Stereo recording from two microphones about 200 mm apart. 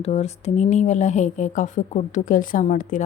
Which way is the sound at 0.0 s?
30° left (ahead or behind).